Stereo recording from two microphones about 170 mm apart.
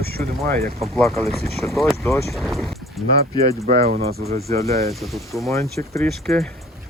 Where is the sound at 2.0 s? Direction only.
15° left (ahead or behind).